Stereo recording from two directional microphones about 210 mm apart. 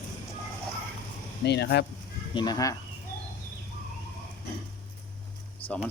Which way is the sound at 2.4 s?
20° left (ahead or behind).